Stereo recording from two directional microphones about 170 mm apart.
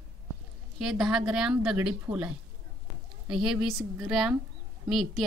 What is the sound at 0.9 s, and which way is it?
A woman's voice, centre (ahead or behind).